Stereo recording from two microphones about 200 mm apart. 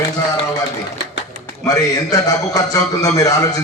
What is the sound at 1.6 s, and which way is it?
A man's voice, 15° left (ahead or behind).